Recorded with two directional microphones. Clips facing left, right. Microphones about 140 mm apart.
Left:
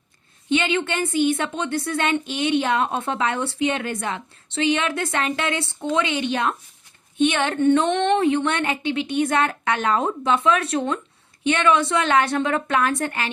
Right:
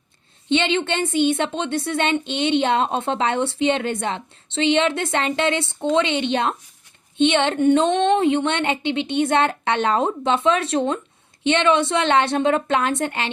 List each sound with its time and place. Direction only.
0.5 s a woman's voice: 25° right (ahead or behind)